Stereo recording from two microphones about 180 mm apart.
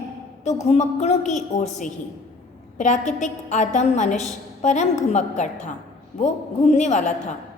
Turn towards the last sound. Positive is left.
turn(degrees=40)  # may be behind; listen again after turning